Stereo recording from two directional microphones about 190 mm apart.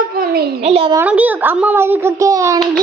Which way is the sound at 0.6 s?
30° right (ahead or behind).